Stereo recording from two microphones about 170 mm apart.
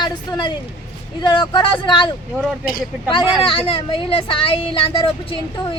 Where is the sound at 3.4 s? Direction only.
30° left (ahead or behind).